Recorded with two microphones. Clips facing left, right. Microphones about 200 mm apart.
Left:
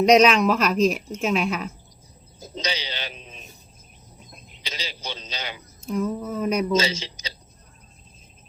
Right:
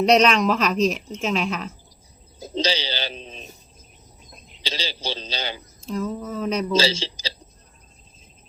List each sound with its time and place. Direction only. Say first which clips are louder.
0.0 s speech: left 1 dB; 10° left (ahead or behind)
2.6 s a sound: right 6 dB; 30° right (ahead or behind)
4.6 s a man's voice: right 5 dB; 30° right (ahead or behind)
5.9 s speech: left 1 dB; 10° left (ahead or behind)
6.7 s speech: right 2 dB; 30° right (ahead or behind)